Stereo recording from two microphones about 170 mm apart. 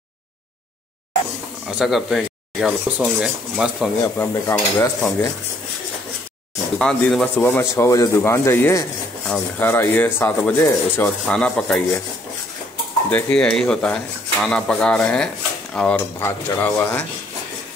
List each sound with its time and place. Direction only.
1.7 s speech: 5° right (ahead or behind)
4.0 s speech: 15° left (ahead or behind)
6.8 s speech: 5° left (ahead or behind)
13.1 s speech: 5° left (ahead or behind)